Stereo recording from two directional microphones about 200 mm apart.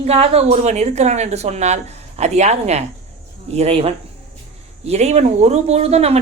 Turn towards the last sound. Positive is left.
turn(degrees=-30)  # may be behind; listen again after turning